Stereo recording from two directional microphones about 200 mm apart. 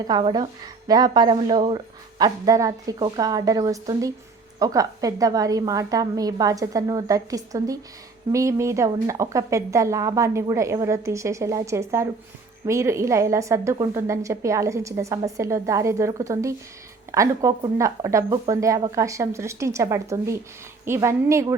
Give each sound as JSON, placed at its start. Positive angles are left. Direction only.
{"t": 0.1, "sound": "a woman's voice", "side_deg": -20}